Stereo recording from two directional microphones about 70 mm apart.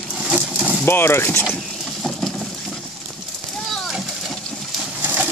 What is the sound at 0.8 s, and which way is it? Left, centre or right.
Speech, left.